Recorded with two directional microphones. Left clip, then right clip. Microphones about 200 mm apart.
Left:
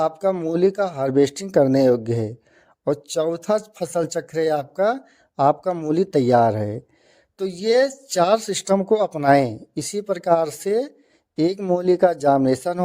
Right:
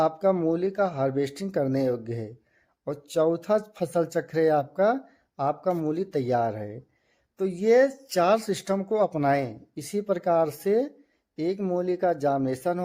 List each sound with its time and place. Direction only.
0.0 s speech: 40° left (ahead or behind)